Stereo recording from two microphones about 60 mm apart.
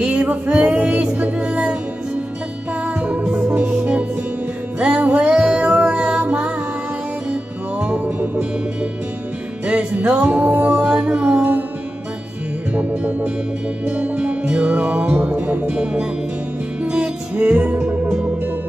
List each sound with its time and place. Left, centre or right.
0.0 s music: centre
3.0 s music: centre
7.8 s music: right
9.7 s music: right
12.7 s music: right
15.7 s speech: centre
16.8 s music: centre